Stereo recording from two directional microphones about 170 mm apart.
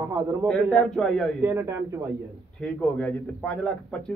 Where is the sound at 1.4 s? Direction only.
15° right (ahead or behind).